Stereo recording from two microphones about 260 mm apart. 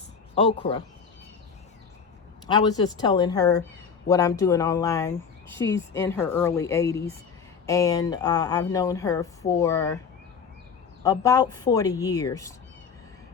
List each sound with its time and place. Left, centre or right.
0.3 s speech: left
2.5 s speech: centre
11.0 s speech: centre